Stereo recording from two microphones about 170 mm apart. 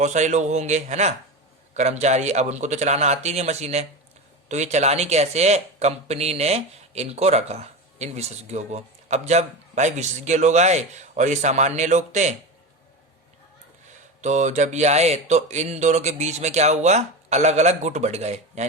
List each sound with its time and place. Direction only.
0.0 s speech: 45° right (ahead or behind)
14.2 s speech: 45° right (ahead or behind)